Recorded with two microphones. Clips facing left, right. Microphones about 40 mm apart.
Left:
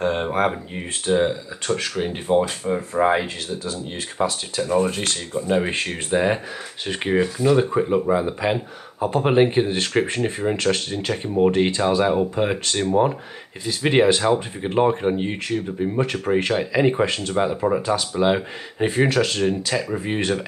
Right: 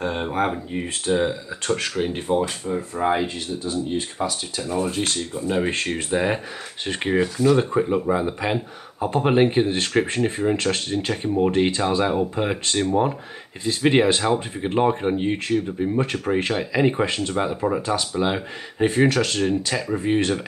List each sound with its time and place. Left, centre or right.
0.0 s speech: centre
2.3 s speech: left
5.1 s speech: centre